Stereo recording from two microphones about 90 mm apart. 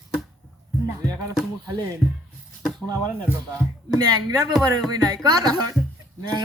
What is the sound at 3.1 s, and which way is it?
Speech, 20° right (ahead or behind).